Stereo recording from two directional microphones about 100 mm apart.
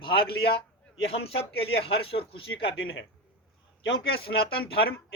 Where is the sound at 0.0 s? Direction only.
55° left (ahead or behind).